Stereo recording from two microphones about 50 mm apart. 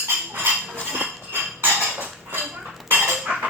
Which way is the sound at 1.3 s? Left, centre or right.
Right.